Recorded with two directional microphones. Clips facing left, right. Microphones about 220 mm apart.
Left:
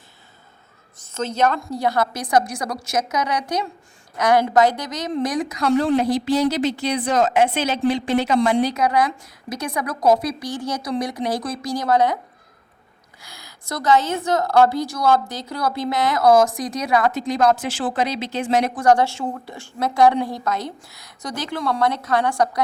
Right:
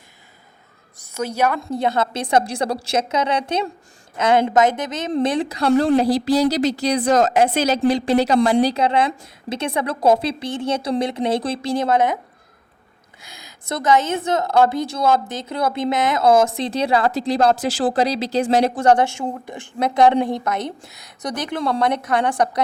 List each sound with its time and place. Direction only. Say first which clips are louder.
1.1 s a woman's voice: even; 10° right (ahead or behind)
13.2 s a woman's voice: right 3 dB; 20° right (ahead or behind)